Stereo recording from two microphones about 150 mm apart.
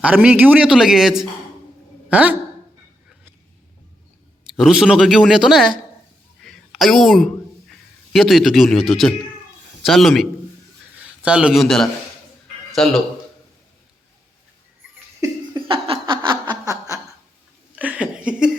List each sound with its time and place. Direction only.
0.0 s a woman's voice: 10° right (ahead or behind)
4.4 s speech: 5° right (ahead or behind)
6.4 s a sound: centre (ahead or behind)
7.7 s speech: centre (ahead or behind)
15.2 s laughter: 30° right (ahead or behind)
17.7 s a sound: 10° right (ahead or behind)